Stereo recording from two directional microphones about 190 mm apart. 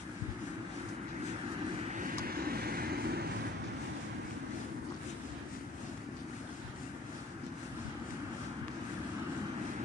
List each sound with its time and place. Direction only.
2.0 s vehicle: 50° right (ahead or behind)